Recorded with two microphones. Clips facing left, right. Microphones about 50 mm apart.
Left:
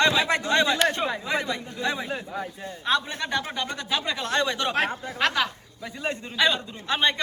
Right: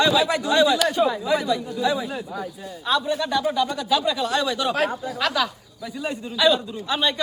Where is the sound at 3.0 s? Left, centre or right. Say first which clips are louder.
Right 6 dB; left; by 4.6 s centre.